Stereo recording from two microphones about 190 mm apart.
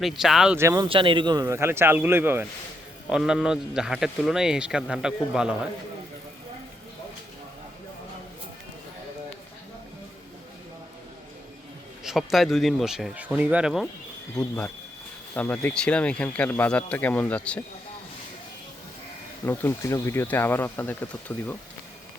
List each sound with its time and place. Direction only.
0.0 s a man's voice: centre (ahead or behind)
0.5 s speech: 15° right (ahead or behind)
0.9 s a man's voice: 25° right (ahead or behind); by 5.5 s 5° right (ahead or behind)
12.0 s a man's voice: centre (ahead or behind)
14.3 s speech: 5° left (ahead or behind)
19.5 s speech: 15° left (ahead or behind)